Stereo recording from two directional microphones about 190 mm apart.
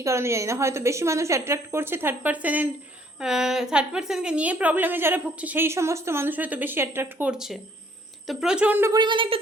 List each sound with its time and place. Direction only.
0.0 s a woman's voice: 15° right (ahead or behind)